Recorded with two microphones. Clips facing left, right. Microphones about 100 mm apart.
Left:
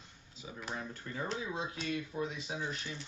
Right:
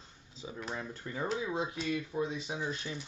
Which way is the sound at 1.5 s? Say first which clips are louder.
Right 4 dB; 25° right (ahead or behind).